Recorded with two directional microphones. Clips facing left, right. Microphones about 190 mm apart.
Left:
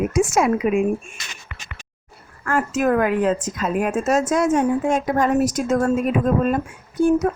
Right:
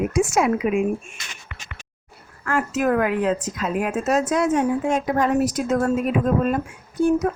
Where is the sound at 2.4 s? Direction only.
45° left (ahead or behind).